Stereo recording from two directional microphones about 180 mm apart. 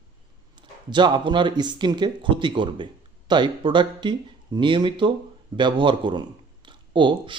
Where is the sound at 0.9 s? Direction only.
25° right (ahead or behind).